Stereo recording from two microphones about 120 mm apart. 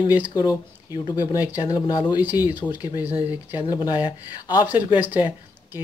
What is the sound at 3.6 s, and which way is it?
Speech, 35° left (ahead or behind).